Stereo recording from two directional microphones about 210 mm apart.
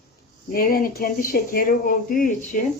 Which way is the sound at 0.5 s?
45° left (ahead or behind).